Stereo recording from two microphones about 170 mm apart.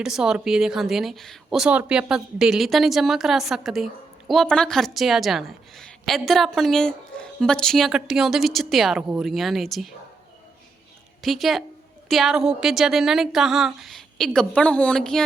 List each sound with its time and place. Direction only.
0.0 s a woman's voice: 5° right (ahead or behind)
11.2 s a woman's voice: centre (ahead or behind)